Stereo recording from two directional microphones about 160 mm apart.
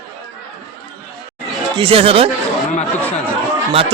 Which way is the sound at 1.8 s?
35° right (ahead or behind).